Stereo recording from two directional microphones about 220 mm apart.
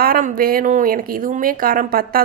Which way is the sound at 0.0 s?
40° right (ahead or behind).